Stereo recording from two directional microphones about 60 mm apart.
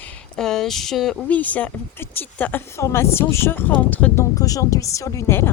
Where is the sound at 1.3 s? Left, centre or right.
Left.